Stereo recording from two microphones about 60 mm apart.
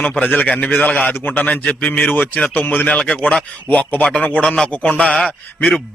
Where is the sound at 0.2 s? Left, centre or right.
Left.